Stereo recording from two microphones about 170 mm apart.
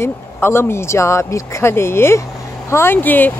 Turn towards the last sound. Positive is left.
turn(degrees=10)  # may be behind; listen again after turning